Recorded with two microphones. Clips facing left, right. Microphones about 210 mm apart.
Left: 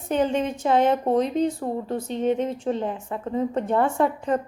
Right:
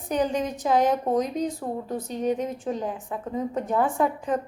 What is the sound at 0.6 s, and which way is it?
A woman's voice, 5° right (ahead or behind).